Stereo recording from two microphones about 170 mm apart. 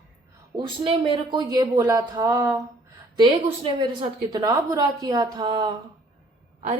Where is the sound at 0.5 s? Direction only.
30° right (ahead or behind).